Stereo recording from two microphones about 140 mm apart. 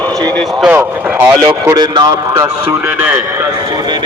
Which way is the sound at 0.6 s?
15° right (ahead or behind).